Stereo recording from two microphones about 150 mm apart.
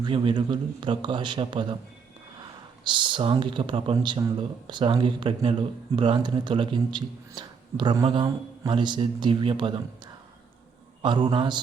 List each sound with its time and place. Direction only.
0.0 s speech: 35° right (ahead or behind)
11.0 s speech: 30° right (ahead or behind)